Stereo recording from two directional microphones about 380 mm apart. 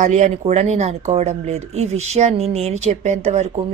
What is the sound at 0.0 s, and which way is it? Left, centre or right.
Speech, centre.